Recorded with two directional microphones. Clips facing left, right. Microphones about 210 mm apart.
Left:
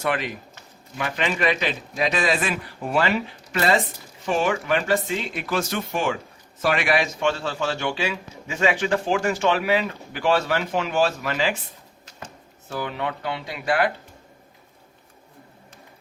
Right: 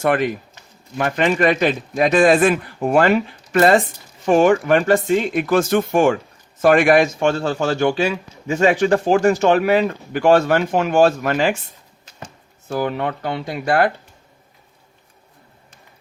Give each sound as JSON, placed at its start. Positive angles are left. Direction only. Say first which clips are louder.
{"t": 0.0, "sound": "a man's voice", "louder": "right 8 dB", "side_deg": -50}
{"t": 12.6, "sound": "a man's voice", "louder": "right 7 dB", "side_deg": -45}